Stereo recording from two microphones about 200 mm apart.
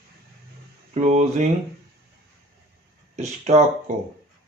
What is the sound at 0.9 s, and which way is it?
Speech, 35° right (ahead or behind).